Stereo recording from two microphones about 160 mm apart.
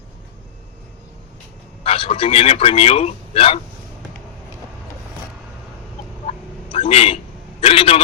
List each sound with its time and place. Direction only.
1.8 s a man's voice: 35° left (ahead or behind)
6.2 s a sound: 35° left (ahead or behind)
7.6 s a man's voice: 35° left (ahead or behind)